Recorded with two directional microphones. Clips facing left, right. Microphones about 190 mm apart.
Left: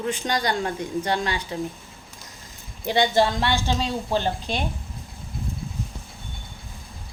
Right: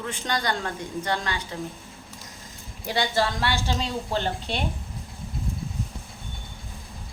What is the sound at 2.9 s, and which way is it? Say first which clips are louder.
A woman's voice: left 5 dB; 20° left (ahead or behind).